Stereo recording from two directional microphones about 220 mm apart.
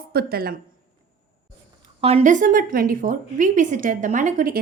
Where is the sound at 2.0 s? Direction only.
30° right (ahead or behind).